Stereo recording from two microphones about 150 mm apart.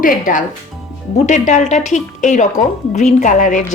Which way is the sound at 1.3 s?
55° left (ahead or behind).